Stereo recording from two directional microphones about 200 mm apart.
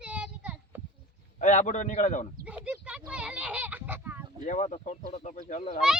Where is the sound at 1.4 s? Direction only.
35° left (ahead or behind).